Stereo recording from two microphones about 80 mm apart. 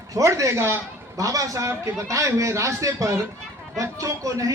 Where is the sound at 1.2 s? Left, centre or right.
Right.